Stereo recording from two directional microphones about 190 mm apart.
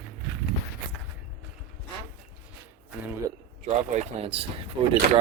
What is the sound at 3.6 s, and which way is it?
Speech, 35° right (ahead or behind).